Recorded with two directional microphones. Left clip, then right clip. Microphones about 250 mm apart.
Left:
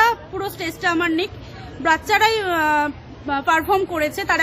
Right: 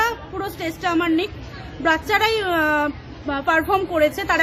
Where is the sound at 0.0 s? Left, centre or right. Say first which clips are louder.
Left 4 dB; centre.